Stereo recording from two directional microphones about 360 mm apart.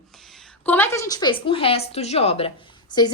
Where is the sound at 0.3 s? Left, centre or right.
Centre.